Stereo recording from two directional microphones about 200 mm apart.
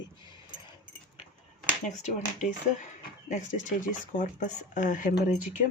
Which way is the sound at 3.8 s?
40° left (ahead or behind).